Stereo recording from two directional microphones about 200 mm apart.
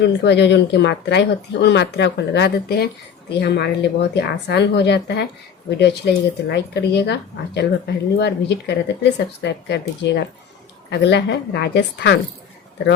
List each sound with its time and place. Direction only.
0.0 s speech: 60° left (ahead or behind)